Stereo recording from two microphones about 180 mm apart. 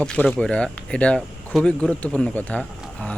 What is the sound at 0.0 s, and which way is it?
Speech, 5° left (ahead or behind).